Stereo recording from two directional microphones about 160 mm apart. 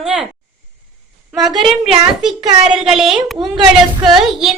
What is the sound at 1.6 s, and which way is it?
A woman's voice, centre (ahead or behind).